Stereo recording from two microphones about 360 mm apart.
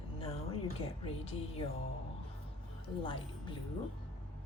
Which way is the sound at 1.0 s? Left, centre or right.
Centre.